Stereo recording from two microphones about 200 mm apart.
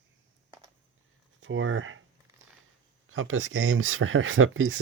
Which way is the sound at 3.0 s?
90° right.